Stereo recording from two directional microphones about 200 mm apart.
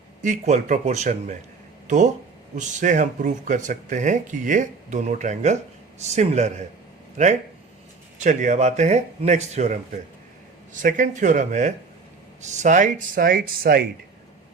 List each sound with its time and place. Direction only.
0.2 s speech: 40° right (ahead or behind)
2.6 s speech: 40° right (ahead or behind)
8.2 s speech: 40° right (ahead or behind)
10.8 s speech: 40° right (ahead or behind)